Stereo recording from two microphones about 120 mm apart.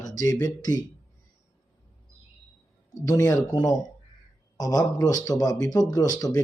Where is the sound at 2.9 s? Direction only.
30° left (ahead or behind).